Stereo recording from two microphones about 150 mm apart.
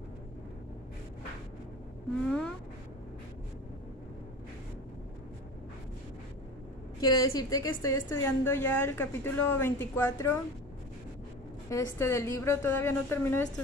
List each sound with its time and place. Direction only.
2.2 s cat: 5° left (ahead or behind)
7.0 s a woman's voice: 25° left (ahead or behind)
11.7 s a woman's voice: 20° left (ahead or behind)